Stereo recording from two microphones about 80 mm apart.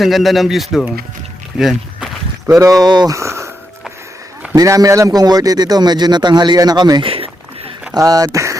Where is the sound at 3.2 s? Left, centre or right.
Right.